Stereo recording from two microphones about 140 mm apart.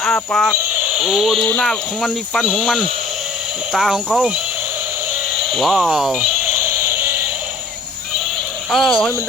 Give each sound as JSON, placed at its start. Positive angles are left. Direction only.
{"t": 0.0, "sound": "speech", "side_deg": 0}
{"t": 5.4, "sound": "speech", "side_deg": 0}
{"t": 6.6, "sound": "music", "side_deg": -15}
{"t": 8.7, "sound": "speech", "side_deg": 0}